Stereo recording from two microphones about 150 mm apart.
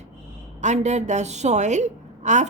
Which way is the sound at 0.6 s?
50° right (ahead or behind).